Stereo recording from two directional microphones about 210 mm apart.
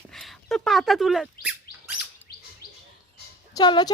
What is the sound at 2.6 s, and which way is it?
Chirp, 45° left (ahead or behind).